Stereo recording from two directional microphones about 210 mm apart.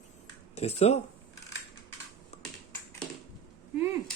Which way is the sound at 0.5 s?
30° left (ahead or behind).